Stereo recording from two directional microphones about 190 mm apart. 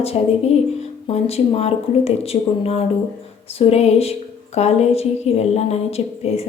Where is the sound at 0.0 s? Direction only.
30° left (ahead or behind).